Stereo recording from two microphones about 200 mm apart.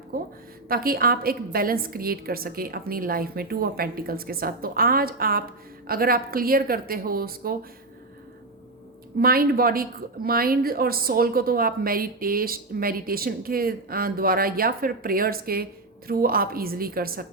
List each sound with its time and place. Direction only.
0.1 s a woman's voice: 45° right (ahead or behind)
9.1 s a woman's voice: 45° right (ahead or behind)